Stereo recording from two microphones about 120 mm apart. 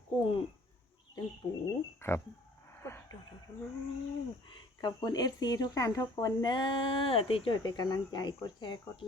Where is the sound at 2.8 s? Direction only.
20° left (ahead or behind).